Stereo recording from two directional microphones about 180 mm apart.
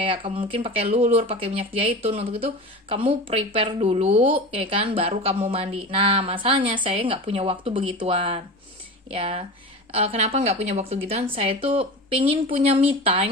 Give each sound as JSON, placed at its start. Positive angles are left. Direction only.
{"t": 0.0, "sound": "speech", "side_deg": -30}